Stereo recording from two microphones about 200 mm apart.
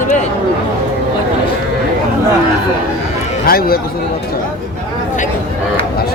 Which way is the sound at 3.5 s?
50° left (ahead or behind).